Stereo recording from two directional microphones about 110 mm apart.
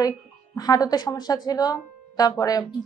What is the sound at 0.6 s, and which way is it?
Speech, 35° left (ahead or behind).